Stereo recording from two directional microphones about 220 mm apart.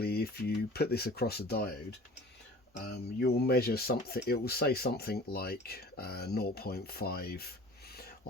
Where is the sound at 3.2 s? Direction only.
45° left (ahead or behind).